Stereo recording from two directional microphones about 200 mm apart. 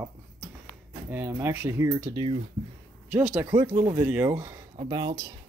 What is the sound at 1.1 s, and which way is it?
A man's voice, 10° right (ahead or behind).